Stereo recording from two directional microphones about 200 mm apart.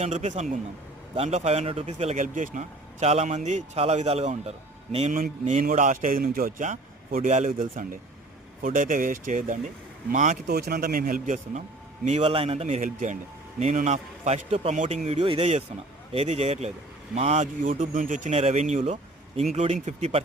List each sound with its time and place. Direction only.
0.0 s a man's voice: 35° right (ahead or behind)
10.5 s a man's voice: 50° right (ahead or behind); by 20.2 s 35° right (ahead or behind)